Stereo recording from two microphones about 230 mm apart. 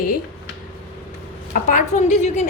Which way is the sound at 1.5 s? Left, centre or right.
Left.